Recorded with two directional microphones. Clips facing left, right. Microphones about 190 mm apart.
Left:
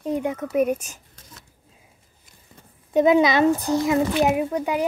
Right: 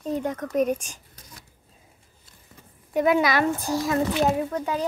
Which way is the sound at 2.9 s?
20° left (ahead or behind).